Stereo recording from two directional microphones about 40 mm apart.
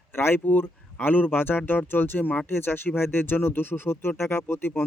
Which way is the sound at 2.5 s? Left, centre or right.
Left.